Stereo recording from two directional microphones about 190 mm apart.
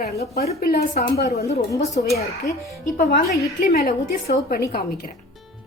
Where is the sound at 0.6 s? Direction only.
55° left (ahead or behind).